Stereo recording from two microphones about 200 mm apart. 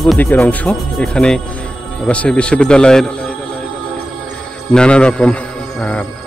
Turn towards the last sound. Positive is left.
turn(degrees=5)  # may be behind; listen again after turning